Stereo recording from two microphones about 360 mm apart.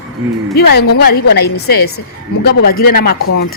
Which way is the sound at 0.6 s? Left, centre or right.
Left.